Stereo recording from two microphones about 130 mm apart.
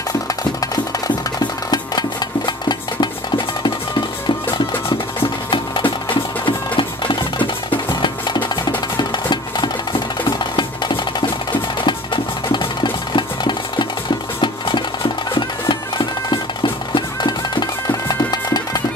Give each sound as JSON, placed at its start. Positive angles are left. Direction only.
{"t": 0.4, "sound": "music", "side_deg": 30}
{"t": 1.7, "sound": "a sound", "side_deg": 30}
{"t": 3.0, "sound": "music", "side_deg": 35}
{"t": 5.5, "sound": "music", "side_deg": 40}
{"t": 16.3, "sound": "music", "side_deg": 35}